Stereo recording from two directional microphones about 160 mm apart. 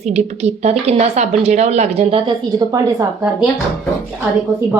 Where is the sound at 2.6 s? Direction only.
25° right (ahead or behind).